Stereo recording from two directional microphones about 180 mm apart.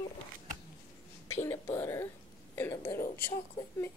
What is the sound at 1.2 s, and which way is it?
Speech, 15° left (ahead or behind).